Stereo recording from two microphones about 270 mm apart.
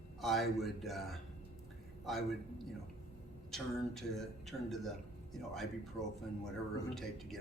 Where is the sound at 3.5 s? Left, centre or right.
Centre.